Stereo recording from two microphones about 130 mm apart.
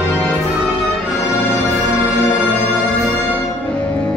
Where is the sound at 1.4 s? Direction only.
15° left (ahead or behind).